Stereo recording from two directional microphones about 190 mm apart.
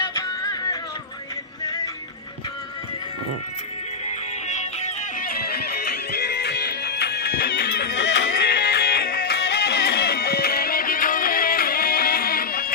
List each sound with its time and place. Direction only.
0.0 s music: 20° left (ahead or behind)
4.4 s music: 40° left (ahead or behind)
5.3 s music: 55° left (ahead or behind)